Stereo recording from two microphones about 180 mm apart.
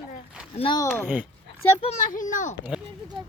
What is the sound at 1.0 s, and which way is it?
Speech, 10° right (ahead or behind).